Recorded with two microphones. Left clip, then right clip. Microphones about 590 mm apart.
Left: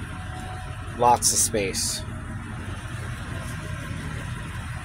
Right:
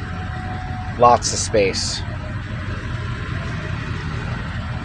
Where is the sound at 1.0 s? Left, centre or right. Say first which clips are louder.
Right 6 dB; left.